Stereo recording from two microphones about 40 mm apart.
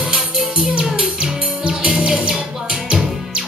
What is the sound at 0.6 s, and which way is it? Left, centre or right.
Music, right.